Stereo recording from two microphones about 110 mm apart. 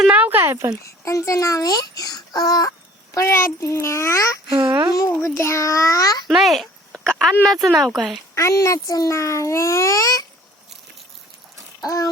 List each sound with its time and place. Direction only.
0.0 s speech: 10° right (ahead or behind)
0.9 s a child's voice: 30° left (ahead or behind)
3.2 s a child's voice: 25° left (ahead or behind)
6.2 s speech: centre (ahead or behind)
8.4 s a child's voice: 30° left (ahead or behind)
11.8 s a sound: 30° left (ahead or behind)